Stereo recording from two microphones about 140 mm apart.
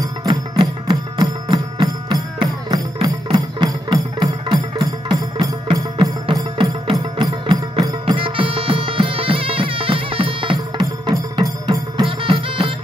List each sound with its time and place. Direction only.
0.0 s music: 25° right (ahead or behind)
6.2 s music: 40° right (ahead or behind)